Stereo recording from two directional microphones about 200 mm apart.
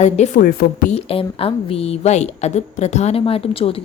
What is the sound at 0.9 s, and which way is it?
A woman's voice, 30° left (ahead or behind).